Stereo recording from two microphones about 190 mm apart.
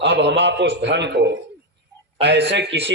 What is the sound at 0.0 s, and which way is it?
A man's voice, 65° right (ahead or behind).